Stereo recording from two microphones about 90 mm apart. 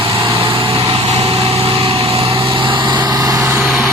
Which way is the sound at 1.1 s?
90° right.